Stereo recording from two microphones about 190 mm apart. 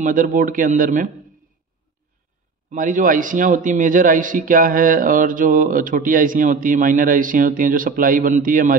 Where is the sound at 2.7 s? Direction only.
45° right (ahead or behind).